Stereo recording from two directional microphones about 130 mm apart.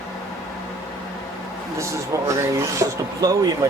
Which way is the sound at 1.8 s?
20° right (ahead or behind).